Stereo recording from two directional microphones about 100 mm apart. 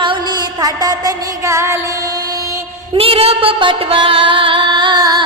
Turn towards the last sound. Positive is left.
turn(degrees=-45)  # may be behind; listen again after turning